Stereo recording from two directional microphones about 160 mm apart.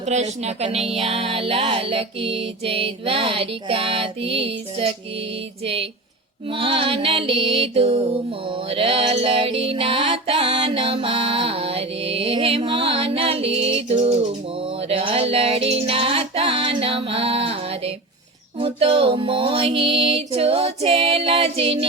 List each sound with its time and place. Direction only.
0.0 s music: 45° right (ahead or behind)